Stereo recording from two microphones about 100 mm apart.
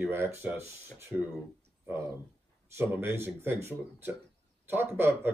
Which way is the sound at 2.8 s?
25° right (ahead or behind).